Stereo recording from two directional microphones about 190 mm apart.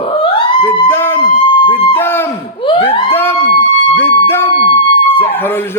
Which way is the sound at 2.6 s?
25° left (ahead or behind).